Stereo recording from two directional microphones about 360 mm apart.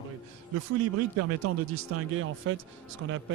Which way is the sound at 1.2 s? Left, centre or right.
Right.